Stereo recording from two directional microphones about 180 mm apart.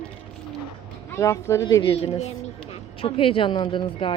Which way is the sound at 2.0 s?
35° left (ahead or behind).